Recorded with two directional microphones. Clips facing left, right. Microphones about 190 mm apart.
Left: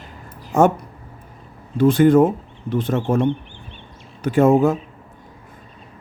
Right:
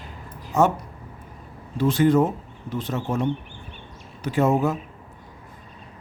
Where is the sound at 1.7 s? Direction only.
55° left (ahead or behind).